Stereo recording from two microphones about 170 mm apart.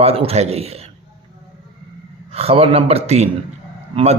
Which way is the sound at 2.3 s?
35° right (ahead or behind).